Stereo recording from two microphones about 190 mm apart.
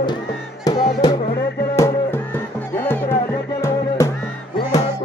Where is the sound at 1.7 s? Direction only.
15° left (ahead or behind).